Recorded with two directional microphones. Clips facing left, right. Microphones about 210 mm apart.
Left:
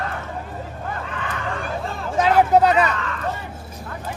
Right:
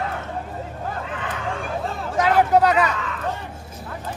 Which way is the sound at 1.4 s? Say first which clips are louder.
Even; centre (ahead or behind).